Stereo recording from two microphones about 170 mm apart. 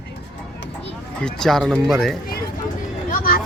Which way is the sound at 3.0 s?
55° left (ahead or behind).